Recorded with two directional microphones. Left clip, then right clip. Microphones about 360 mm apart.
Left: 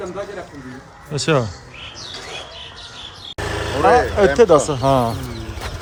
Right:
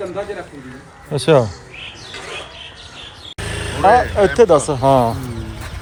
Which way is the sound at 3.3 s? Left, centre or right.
Centre.